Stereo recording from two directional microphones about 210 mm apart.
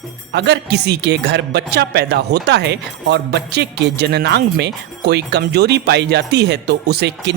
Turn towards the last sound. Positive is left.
turn(degrees=-50)  # may be behind; listen again after turning